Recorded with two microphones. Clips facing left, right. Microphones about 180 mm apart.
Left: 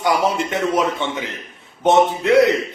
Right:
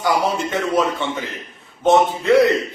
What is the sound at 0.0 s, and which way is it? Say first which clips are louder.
A man's voice: left 1 dB; 20° left (ahead or behind).